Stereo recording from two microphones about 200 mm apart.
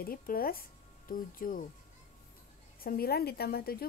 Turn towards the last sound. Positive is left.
turn(degrees=50)  # may be behind; listen again after turning